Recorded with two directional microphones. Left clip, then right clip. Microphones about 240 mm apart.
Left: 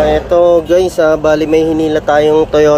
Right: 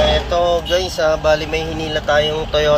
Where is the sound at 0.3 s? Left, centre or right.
Left.